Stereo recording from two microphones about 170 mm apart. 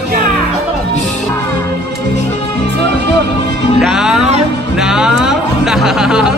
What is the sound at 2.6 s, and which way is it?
Music, 75° right (ahead or behind).